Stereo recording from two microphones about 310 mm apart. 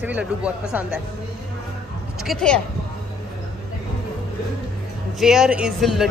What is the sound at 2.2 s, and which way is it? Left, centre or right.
Speech, centre.